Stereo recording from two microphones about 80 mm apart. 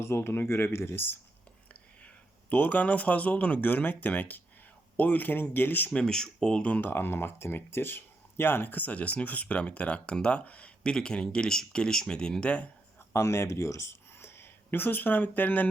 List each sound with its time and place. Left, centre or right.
0.0 s speech: left
5.9 s speech: centre
13.1 s speech: left